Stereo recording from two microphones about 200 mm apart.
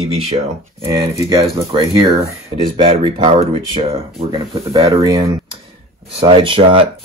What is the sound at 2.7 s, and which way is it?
Speech, 25° right (ahead or behind).